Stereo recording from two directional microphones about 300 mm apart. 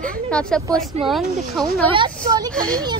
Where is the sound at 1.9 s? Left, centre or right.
Centre.